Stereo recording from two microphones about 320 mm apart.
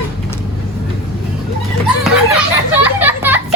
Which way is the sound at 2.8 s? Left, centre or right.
Centre.